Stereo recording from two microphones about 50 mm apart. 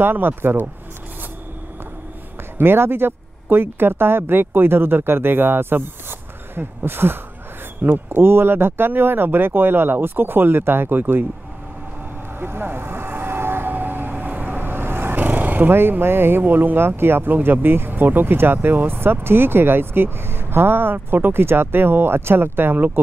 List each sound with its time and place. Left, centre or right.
0.0 s speech: right
2.5 s speech: right
12.4 s speech: right